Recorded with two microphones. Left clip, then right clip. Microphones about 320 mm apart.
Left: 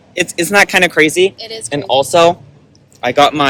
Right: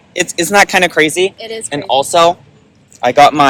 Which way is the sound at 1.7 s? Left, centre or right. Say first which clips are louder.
Even; centre.